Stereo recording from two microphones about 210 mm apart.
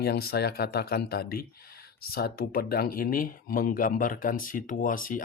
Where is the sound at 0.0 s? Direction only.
50° left (ahead or behind).